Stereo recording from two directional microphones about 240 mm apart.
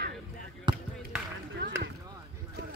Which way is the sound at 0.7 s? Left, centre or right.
Centre.